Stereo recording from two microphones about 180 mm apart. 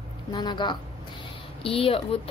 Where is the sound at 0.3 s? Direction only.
25° left (ahead or behind).